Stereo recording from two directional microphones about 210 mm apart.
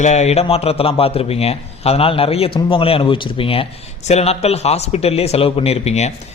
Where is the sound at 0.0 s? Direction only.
30° left (ahead or behind).